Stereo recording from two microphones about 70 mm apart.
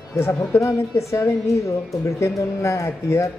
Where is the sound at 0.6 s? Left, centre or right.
Left.